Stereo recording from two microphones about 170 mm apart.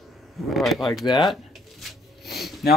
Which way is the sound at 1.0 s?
25° left (ahead or behind).